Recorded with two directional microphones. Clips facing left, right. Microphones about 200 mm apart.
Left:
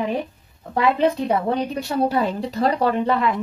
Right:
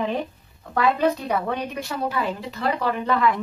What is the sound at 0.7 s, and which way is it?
A woman's voice, 25° left (ahead or behind).